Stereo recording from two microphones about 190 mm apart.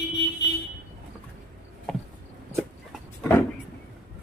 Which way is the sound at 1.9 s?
Centre (ahead or behind).